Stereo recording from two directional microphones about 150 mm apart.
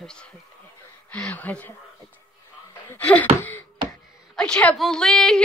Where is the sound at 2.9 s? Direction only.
10° left (ahead or behind).